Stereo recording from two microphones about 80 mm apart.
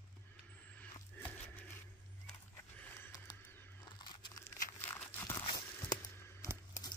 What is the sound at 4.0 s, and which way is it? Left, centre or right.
Crumpling, left.